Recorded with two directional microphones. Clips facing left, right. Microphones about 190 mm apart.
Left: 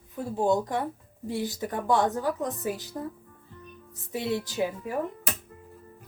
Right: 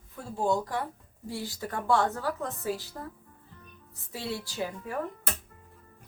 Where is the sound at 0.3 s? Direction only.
20° left (ahead or behind).